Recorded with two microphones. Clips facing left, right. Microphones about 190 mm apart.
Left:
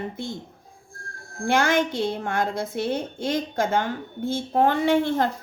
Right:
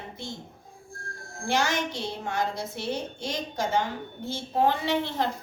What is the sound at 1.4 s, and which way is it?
A woman's voice, 55° left (ahead or behind).